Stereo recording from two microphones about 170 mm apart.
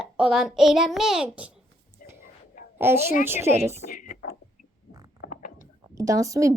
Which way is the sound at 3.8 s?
50° left (ahead or behind).